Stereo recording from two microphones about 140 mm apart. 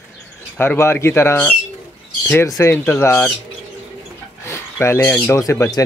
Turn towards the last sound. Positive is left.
turn(degrees=20)  # may be behind; listen again after turning